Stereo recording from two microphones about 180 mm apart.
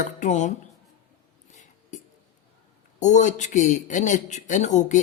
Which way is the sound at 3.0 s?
40° left (ahead or behind).